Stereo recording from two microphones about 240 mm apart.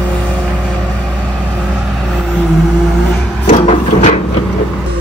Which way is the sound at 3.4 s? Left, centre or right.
Left.